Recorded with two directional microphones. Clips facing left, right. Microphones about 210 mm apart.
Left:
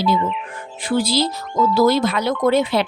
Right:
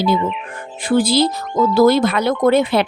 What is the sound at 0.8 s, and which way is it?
Speech, 50° right (ahead or behind).